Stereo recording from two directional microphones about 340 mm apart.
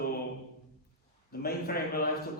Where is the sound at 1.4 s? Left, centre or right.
Left.